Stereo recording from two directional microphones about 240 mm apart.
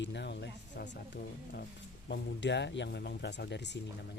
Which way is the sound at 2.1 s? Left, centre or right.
Left.